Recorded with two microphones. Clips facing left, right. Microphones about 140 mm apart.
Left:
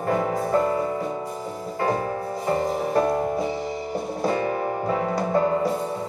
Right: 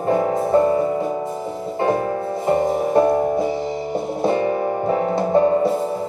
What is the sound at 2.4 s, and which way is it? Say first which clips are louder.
Music: right 6 dB; 25° right (ahead or behind).